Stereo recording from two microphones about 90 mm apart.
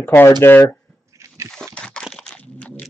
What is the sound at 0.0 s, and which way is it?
Speech, 20° left (ahead or behind).